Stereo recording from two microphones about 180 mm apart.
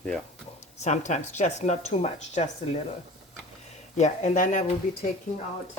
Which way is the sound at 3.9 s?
40° left (ahead or behind).